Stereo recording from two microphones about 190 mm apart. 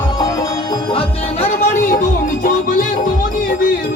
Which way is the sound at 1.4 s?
40° left (ahead or behind).